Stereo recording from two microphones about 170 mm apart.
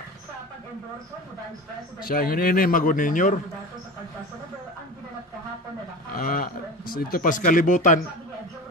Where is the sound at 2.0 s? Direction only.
60° left (ahead or behind).